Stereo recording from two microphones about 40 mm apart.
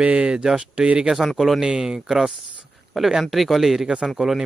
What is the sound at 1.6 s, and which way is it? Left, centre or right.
Speech, right.